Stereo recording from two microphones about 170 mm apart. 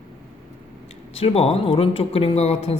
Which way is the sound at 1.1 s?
35° left (ahead or behind).